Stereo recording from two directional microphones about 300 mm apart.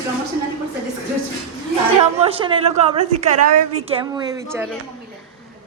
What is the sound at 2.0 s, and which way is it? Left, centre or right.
Speech, right.